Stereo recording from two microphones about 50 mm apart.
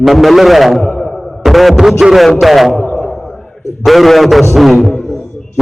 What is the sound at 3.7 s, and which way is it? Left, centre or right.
A man's voice, centre.